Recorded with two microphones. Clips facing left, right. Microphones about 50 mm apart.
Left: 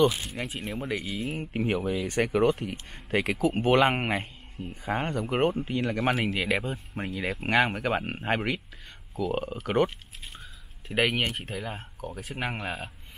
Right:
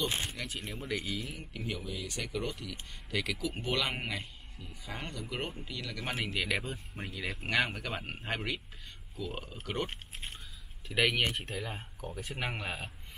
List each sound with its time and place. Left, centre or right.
0.3 s speech: left
1.2 s speech: left
6.4 s speech: left
7.1 s speech: left
10.9 s speech: left
11.3 s speech: centre